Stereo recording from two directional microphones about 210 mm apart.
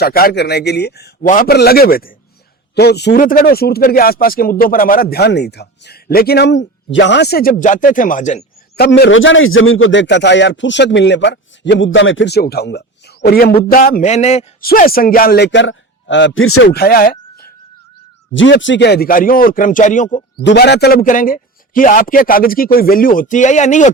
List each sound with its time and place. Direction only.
0.0 s speech: 45° left (ahead or behind)
8.7 s a man's voice: 50° left (ahead or behind)
14.1 s speech: 30° left (ahead or behind)
14.6 s a man's voice: 45° left (ahead or behind); by 16.6 s 80° left
16.6 s speech: 45° left (ahead or behind)
18.3 s speech: 60° left (ahead or behind); by 20.1 s 35° left (ahead or behind)
20.4 s speech: 55° left (ahead or behind); by 23.9 s 35° left (ahead or behind)